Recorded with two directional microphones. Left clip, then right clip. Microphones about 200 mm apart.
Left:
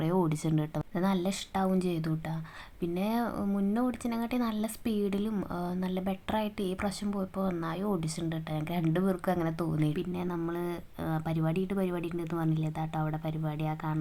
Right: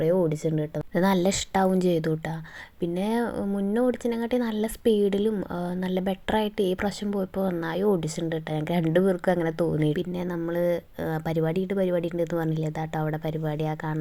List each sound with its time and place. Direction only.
0.0 s a woman's voice: 5° right (ahead or behind)
0.9 s speech: 30° right (ahead or behind)